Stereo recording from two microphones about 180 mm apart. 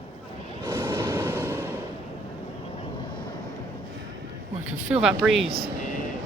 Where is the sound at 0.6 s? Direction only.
15° right (ahead or behind).